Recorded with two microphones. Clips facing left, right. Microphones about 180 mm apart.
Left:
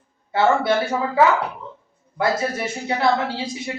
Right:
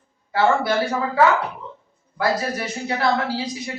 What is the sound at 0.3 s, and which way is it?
A woman's voice, 25° left (ahead or behind).